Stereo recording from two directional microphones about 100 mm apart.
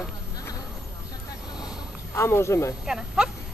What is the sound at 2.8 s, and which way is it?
Speech, 5° right (ahead or behind).